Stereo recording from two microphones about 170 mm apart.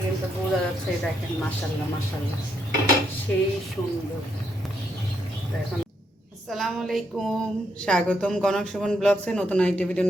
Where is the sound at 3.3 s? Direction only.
5° left (ahead or behind).